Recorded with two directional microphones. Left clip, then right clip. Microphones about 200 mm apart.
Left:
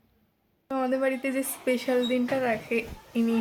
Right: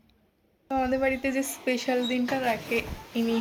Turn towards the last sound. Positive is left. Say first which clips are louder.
# even
turn(degrees=10)  # may be behind; listen again after turning